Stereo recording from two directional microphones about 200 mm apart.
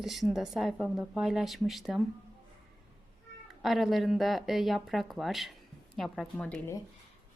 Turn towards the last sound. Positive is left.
turn(degrees=10)  # may be behind; listen again after turning